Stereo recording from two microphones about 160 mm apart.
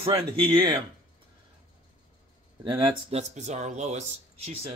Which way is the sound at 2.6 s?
35° right (ahead or behind).